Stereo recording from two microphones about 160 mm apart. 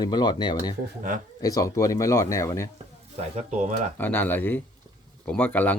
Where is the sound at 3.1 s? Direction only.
50° right (ahead or behind).